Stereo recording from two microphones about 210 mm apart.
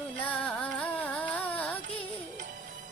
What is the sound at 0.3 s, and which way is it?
Carnatic music, 5° left (ahead or behind).